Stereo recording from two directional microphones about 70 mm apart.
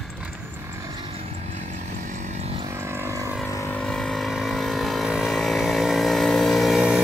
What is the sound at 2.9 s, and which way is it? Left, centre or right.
Vehicle, right.